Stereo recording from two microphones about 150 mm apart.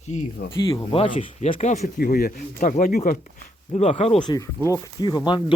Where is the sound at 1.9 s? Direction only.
85° left; by 3.8 s 60° left (ahead or behind).